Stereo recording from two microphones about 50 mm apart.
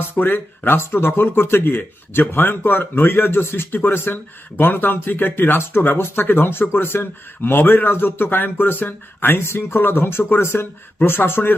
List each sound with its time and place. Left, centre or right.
0.1 s speech: left